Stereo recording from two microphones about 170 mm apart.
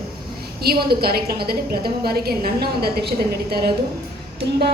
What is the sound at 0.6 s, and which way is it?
A woman's voice, 65° right (ahead or behind).